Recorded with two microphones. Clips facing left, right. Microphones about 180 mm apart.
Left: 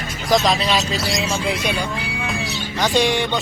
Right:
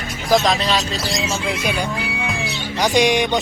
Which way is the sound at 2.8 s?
15° right (ahead or behind).